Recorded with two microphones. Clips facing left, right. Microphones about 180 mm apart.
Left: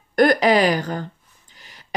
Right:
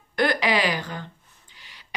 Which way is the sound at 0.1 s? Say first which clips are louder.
Left 7 dB; 45° left (ahead or behind).